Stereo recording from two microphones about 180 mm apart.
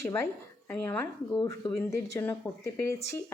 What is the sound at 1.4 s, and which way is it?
Speech, 25° left (ahead or behind).